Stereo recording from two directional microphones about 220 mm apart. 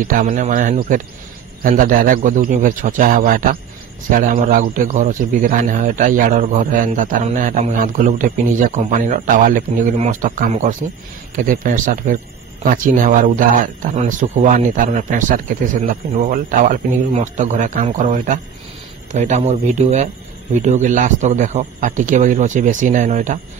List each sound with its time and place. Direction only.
0.0 s speech: 40° right (ahead or behind)